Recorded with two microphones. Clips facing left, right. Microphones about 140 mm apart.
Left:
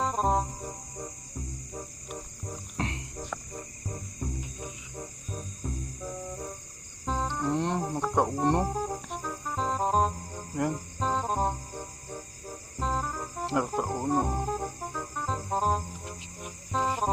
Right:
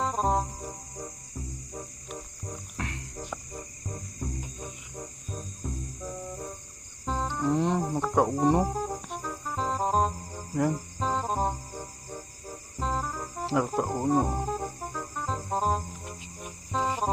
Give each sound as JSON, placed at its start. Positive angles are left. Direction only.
{"t": 0.0, "sound": "cricket", "side_deg": 0}
{"t": 1.7, "sound": "music", "side_deg": 0}
{"t": 2.7, "sound": "music", "side_deg": 25}
{"t": 3.5, "sound": "music", "side_deg": 0}